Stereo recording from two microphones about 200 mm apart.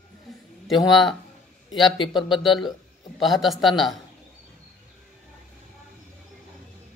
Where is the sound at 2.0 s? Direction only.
25° left (ahead or behind).